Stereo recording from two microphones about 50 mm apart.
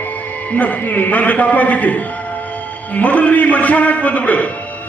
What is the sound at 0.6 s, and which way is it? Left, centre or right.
A man's voice, left.